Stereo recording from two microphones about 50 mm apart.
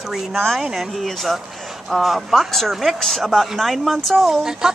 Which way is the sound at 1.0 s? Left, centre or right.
Centre.